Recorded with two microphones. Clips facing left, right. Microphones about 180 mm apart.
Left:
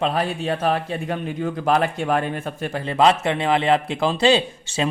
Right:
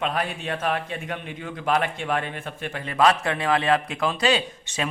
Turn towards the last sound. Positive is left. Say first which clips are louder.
# left 5 dB
turn(degrees=30)  # may be behind; listen again after turning